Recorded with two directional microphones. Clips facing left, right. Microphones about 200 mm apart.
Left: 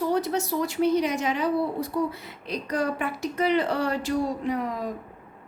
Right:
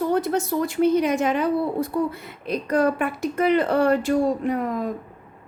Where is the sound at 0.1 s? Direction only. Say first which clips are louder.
Right 3 dB; 55° right (ahead or behind).